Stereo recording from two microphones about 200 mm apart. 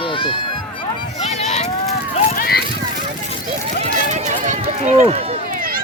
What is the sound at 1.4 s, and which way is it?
Run, 35° left (ahead or behind).